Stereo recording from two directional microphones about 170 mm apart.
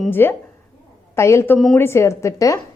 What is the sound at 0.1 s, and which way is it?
A woman's voice, 10° left (ahead or behind).